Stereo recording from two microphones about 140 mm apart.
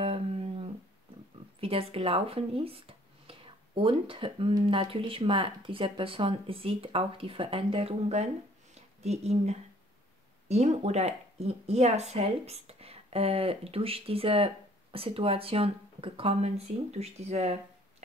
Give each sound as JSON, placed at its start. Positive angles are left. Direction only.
{"t": 0.0, "sound": "dog", "side_deg": -45}
{"t": 1.6, "sound": "a woman's voice", "side_deg": -45}